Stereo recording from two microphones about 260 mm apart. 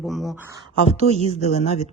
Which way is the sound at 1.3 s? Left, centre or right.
Left.